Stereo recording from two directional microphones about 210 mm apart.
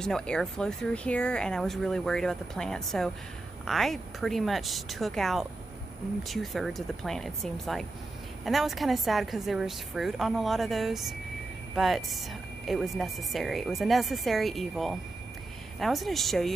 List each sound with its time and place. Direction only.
0.0 s a woman's voice: 5° left (ahead or behind)